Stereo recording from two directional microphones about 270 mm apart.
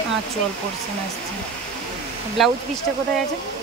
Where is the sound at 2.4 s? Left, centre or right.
Centre.